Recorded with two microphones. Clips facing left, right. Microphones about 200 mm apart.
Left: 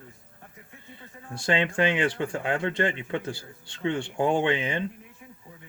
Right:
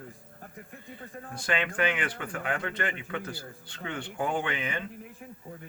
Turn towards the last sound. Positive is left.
turn(degrees=25)  # may be behind; listen again after turning